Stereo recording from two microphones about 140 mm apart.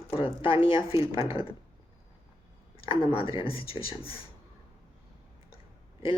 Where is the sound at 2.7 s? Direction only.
40° left (ahead or behind).